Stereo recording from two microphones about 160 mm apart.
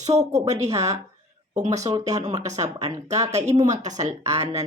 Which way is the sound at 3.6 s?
45° right (ahead or behind).